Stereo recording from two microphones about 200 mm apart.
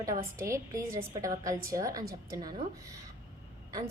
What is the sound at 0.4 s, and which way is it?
A woman's voice, 15° right (ahead or behind).